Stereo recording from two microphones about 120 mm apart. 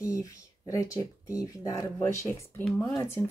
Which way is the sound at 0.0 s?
25° left (ahead or behind).